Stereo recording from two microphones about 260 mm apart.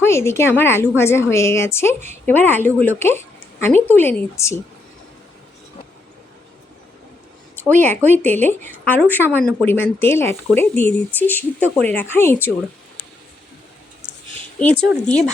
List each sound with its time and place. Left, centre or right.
0.0 s speech: centre
7.6 s speech: centre
14.6 s speech: centre